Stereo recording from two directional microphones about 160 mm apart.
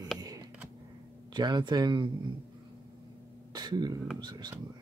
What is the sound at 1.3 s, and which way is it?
Speech, 25° right (ahead or behind).